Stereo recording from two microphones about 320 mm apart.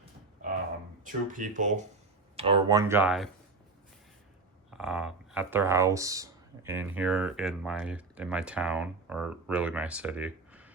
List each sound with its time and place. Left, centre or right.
1.0 s speech: right; by 3.2 s centre
4.7 s speech: centre